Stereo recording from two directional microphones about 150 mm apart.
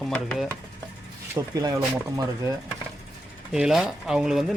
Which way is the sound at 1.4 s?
25° right (ahead or behind).